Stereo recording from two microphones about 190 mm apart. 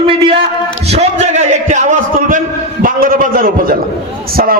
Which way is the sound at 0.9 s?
35° right (ahead or behind).